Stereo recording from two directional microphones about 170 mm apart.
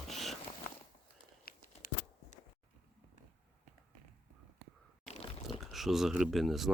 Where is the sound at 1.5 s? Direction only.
60° left (ahead or behind).